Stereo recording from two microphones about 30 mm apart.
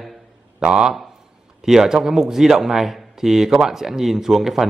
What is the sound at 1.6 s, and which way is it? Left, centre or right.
Speech, centre.